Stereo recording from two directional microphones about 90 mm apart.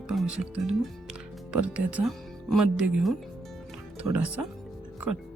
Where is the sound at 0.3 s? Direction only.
15° right (ahead or behind).